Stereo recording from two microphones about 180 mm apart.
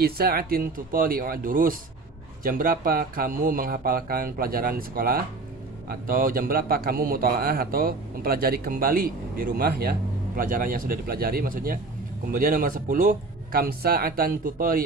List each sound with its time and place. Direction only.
0.0 s a man's voice: 60° right (ahead or behind)